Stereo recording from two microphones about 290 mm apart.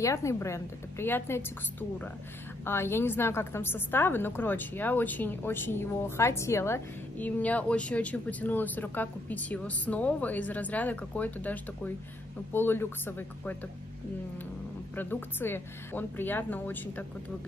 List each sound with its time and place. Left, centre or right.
0.0 s a woman's voice: centre
15.0 s a woman's voice: centre